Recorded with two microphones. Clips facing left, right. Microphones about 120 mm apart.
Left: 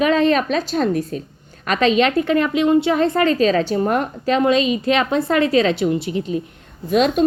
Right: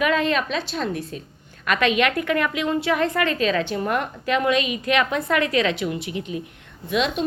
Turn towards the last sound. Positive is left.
turn(degrees=45)  # may be behind; listen again after turning